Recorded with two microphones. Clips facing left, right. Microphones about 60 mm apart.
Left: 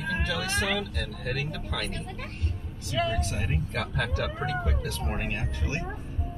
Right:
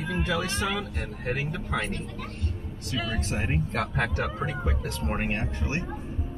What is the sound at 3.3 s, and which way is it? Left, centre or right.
Speech, right.